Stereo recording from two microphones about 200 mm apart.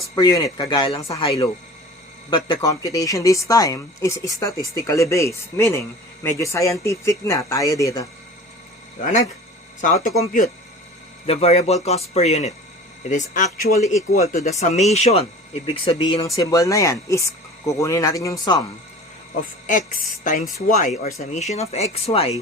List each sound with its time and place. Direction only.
0.2 s a woman's voice: 15° left (ahead or behind)
9.0 s speech: 35° left (ahead or behind)
11.3 s speech: 30° left (ahead or behind)
16.2 s a woman's voice: 15° left (ahead or behind)
20.7 s speech: 35° left (ahead or behind)